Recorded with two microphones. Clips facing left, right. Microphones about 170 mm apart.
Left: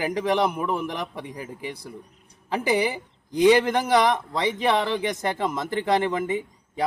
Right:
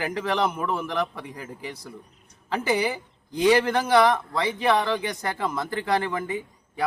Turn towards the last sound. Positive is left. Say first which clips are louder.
# left 3 dB
turn(degrees=20)  # may be behind; listen again after turning